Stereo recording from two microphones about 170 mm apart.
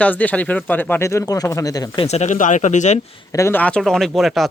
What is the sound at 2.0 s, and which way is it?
Speech, 40° left (ahead or behind).